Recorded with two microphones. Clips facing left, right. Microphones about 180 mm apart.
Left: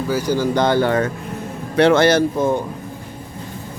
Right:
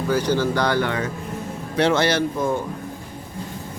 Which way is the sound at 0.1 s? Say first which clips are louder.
Even; 10° left (ahead or behind).